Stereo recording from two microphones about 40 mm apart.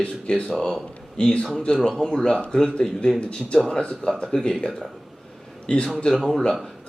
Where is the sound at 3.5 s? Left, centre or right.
Centre.